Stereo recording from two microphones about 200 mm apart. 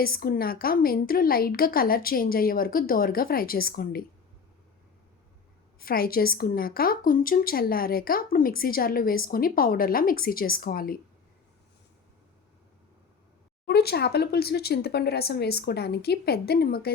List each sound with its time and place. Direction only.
0.0 s a woman's voice: 50° left (ahead or behind)
5.8 s a woman's voice: 50° left (ahead or behind)
13.7 s a woman's voice: 55° left (ahead or behind)